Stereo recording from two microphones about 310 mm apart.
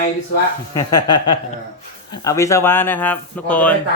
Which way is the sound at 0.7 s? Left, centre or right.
Centre.